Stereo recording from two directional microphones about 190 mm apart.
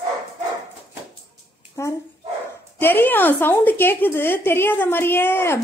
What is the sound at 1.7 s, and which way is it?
A woman's voice, 15° left (ahead or behind).